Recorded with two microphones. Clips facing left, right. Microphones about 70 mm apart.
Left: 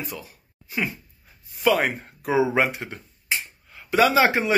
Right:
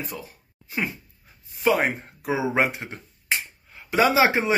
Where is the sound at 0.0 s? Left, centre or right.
Right.